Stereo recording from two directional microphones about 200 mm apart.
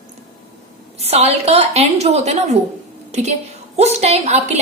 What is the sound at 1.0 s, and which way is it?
A woman's voice, 30° right (ahead or behind).